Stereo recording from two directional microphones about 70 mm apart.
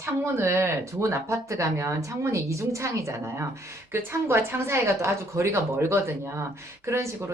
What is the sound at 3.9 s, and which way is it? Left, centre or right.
A woman's voice, right.